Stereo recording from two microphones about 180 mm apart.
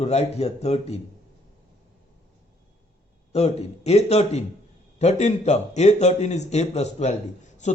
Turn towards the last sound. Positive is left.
turn(degrees=40)  # may be behind; listen again after turning